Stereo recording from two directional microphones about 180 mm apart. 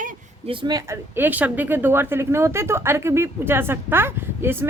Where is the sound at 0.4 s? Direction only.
25° right (ahead or behind).